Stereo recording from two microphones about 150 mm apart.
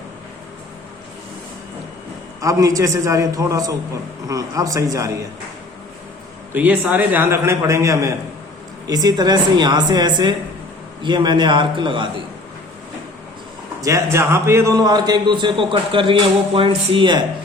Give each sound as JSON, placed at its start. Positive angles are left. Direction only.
{"t": 2.4, "sound": "a man's voice", "side_deg": -20}
{"t": 6.5, "sound": "a man's voice", "side_deg": -10}
{"t": 13.8, "sound": "a man's voice", "side_deg": -20}